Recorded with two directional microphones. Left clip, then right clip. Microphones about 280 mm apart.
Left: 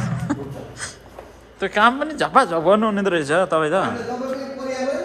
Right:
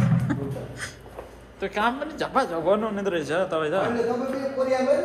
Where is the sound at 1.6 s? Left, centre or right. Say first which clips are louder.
Left 8 dB; left.